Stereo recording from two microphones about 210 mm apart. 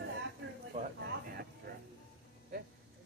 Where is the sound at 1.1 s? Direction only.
50° right (ahead or behind).